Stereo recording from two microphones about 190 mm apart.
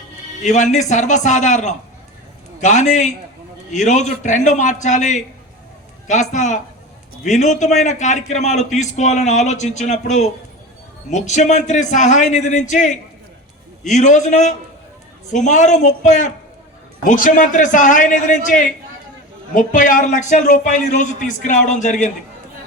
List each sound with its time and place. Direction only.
0.4 s a man's voice: 40° left (ahead or behind)